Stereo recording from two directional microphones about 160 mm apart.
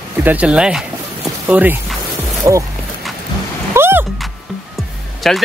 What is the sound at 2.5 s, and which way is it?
Speech, 20° right (ahead or behind).